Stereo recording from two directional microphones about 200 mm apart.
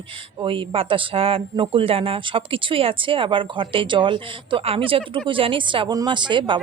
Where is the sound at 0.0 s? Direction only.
25° right (ahead or behind).